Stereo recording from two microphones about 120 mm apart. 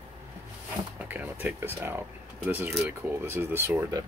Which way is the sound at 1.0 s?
15° right (ahead or behind).